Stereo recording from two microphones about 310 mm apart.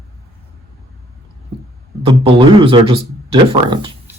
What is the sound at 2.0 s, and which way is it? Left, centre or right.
Speech, centre.